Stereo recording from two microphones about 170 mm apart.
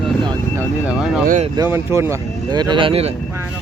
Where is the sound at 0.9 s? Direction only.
5° right (ahead or behind).